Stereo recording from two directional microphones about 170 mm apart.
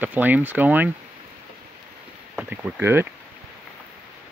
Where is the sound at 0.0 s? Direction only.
10° right (ahead or behind).